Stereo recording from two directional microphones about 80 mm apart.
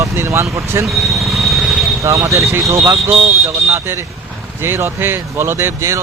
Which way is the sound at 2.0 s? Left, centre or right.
Right.